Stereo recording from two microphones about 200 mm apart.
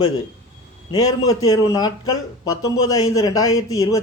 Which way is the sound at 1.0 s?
90° left.